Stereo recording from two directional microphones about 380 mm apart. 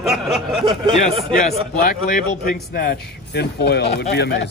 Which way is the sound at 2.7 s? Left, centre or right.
Left.